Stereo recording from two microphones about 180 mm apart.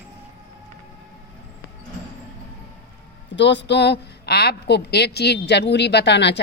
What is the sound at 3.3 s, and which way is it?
Speech, 80° left.